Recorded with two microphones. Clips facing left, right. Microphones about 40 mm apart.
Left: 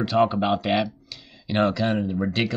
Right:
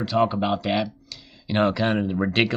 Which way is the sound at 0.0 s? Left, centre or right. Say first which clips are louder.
Left 1 dB; centre.